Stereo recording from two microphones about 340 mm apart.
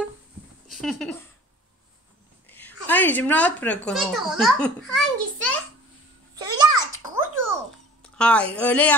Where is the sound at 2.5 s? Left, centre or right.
Centre.